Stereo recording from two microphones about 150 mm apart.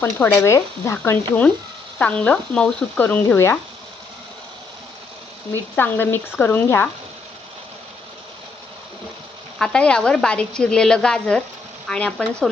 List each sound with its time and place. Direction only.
0.0 s speech: 15° left (ahead or behind)
5.7 s speech: 15° left (ahead or behind)
9.6 s a woman's voice: 5° left (ahead or behind)